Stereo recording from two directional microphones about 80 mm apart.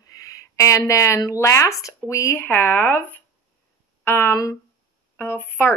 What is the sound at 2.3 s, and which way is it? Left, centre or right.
A woman's voice, left.